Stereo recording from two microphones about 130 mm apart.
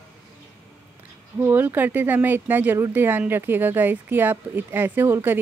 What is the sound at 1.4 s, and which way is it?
Speech, 15° right (ahead or behind).